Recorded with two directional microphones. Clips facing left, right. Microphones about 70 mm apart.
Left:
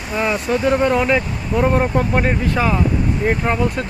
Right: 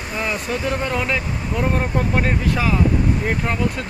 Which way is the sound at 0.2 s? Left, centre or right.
Left.